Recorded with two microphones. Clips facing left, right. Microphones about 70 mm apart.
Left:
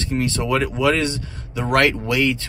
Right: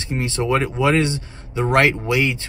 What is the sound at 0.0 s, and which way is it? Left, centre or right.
Speech, right.